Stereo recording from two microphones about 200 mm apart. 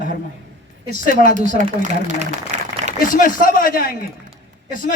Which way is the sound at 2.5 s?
35° right (ahead or behind).